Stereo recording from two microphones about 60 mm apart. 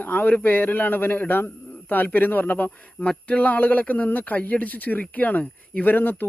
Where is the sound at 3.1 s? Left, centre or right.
Centre.